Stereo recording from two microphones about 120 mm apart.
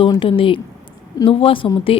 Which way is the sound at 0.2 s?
45° left (ahead or behind).